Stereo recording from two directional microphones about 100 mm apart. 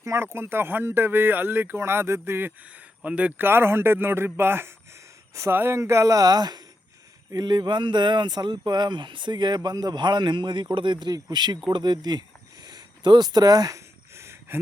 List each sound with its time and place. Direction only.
0.0 s speech: 25° right (ahead or behind)
3.0 s speech: 15° right (ahead or behind); by 12.2 s 45° right (ahead or behind)
12.6 s a sound: 45° right (ahead or behind); by 14.6 s 25° right (ahead or behind)